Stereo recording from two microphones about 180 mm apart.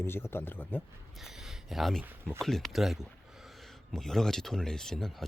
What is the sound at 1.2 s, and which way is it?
Speech, centre (ahead or behind).